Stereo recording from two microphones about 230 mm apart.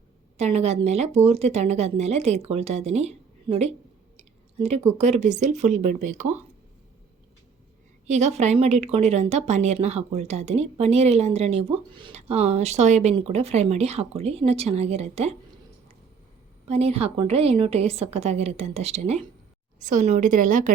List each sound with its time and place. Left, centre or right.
0.3 s a woman's voice: right
8.0 s a woman's voice: right
16.6 s a woman's voice: right